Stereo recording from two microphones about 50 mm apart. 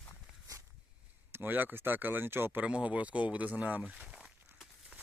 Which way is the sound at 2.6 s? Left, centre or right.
Right.